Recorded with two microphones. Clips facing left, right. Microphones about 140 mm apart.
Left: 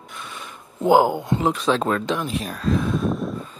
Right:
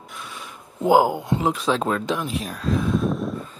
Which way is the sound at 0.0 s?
Centre (ahead or behind).